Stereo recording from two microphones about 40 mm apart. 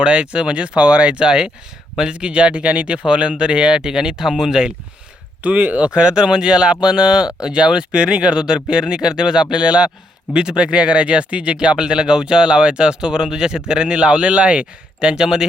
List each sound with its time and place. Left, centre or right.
0.0 s speech: right
5.4 s speech: right; by 15.4 s centre